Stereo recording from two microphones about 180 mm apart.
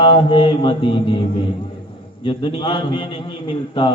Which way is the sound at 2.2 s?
30° left (ahead or behind).